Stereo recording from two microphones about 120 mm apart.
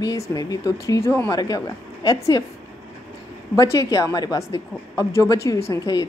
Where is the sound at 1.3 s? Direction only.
35° left (ahead or behind).